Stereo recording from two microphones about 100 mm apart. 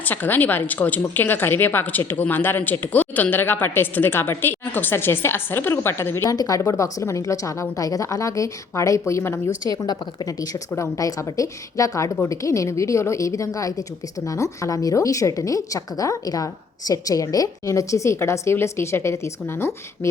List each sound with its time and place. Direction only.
0.0 s a woman's voice: 20° left (ahead or behind)
6.3 s a woman's voice: 40° left (ahead or behind)
9.7 s a woman's voice: 40° left (ahead or behind); by 20.1 s 25° left (ahead or behind)